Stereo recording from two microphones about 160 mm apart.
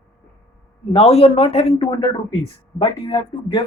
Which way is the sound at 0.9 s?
40° left (ahead or behind).